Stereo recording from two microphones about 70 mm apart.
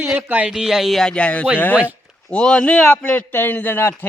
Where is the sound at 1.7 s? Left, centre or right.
Right.